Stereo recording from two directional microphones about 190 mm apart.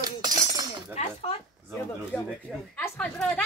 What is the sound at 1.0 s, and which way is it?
Speech, 35° left (ahead or behind).